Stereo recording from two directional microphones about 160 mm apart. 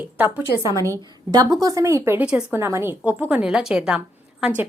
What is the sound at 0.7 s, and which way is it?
Speech, 20° left (ahead or behind).